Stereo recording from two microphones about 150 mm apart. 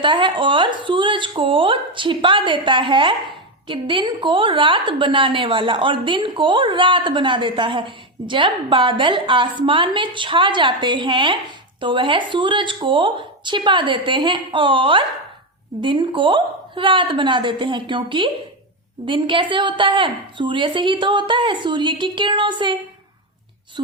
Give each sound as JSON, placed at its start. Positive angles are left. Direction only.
{"t": 0.0, "sound": "a woman's voice", "side_deg": -35}